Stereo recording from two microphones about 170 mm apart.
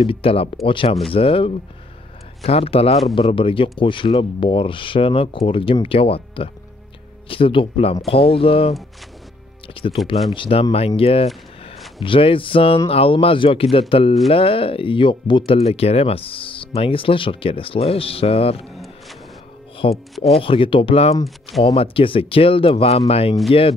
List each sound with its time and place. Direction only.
0.0 s speech: 35° left (ahead or behind)
9.8 s speech: 30° left (ahead or behind)
18.7 s a sound: centre (ahead or behind)
19.8 s speech: 35° left (ahead or behind)